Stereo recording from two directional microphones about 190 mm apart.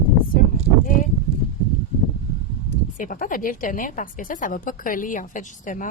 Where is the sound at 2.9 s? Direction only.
45° left (ahead or behind).